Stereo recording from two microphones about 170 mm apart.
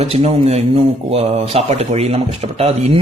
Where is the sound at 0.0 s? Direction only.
40° right (ahead or behind).